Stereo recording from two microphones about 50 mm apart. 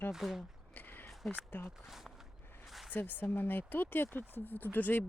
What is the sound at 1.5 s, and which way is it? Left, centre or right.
Speech, left.